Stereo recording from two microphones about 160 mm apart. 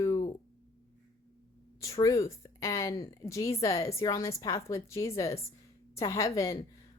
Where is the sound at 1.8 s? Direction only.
20° left (ahead or behind).